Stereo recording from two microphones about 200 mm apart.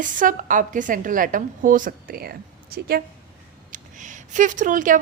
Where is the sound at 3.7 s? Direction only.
40° right (ahead or behind).